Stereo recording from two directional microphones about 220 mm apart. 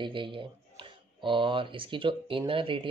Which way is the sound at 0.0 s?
20° right (ahead or behind).